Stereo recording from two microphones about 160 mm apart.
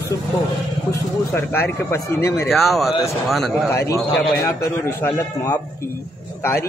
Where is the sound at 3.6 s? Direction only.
20° left (ahead or behind).